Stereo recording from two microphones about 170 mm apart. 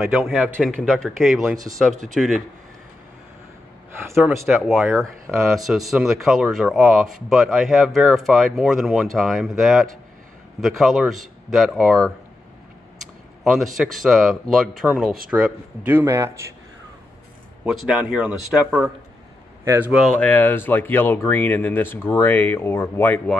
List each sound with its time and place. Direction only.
0.2 s speech: 5° right (ahead or behind)
4.3 s speech: centre (ahead or behind); by 16.5 s 15° right (ahead or behind)
17.6 s speech: 5° right (ahead or behind)
20.2 s speech: 10° left (ahead or behind)